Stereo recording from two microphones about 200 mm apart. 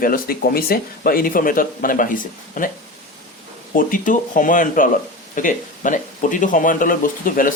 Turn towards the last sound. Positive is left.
turn(degrees=45)  # may be behind; listen again after turning